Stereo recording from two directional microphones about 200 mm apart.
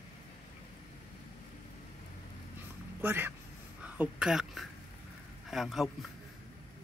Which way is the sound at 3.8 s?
5° right (ahead or behind).